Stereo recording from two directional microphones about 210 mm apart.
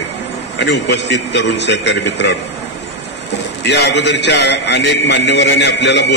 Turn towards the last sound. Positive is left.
turn(degrees=55)  # may be behind; listen again after turning